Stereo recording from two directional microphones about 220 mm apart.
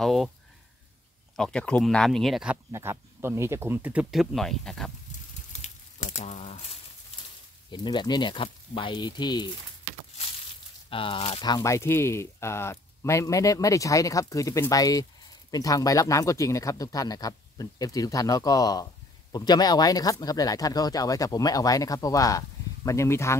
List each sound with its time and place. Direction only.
0.0 s speech: centre (ahead or behind)
1.3 s speech: 5° left (ahead or behind)
5.5 s a sound: 30° left (ahead or behind)
7.7 s speech: 20° left (ahead or behind)
10.9 s speech: 25° left (ahead or behind)